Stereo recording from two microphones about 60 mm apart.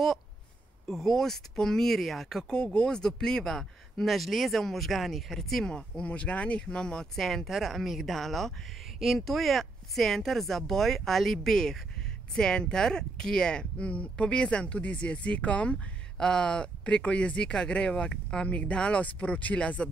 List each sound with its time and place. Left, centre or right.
0.8 s speech: centre